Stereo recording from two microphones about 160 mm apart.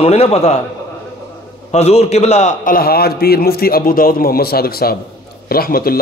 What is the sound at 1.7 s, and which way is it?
A man's voice, 40° left (ahead or behind).